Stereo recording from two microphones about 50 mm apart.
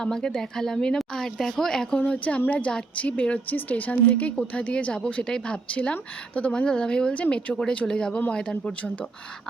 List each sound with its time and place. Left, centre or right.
0.0 s speech: centre
2.0 s speech: left
3.4 s speech: left; by 8.7 s centre